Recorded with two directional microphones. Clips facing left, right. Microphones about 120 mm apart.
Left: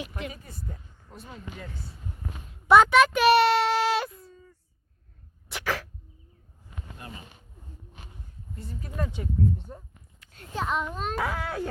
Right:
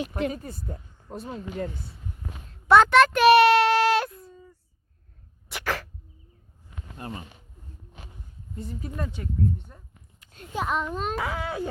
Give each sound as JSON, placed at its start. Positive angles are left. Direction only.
{"t": 0.0, "sound": "speech", "side_deg": -40}
{"t": 2.5, "sound": "a sound", "side_deg": 5}
{"t": 5.5, "sound": "sneeze", "side_deg": 0}
{"t": 9.2, "sound": "speech", "side_deg": 10}
{"t": 9.7, "sound": "speech", "side_deg": 25}
{"t": 10.2, "sound": "a sound", "side_deg": -15}
{"t": 10.7, "sound": "a child's voice", "side_deg": 0}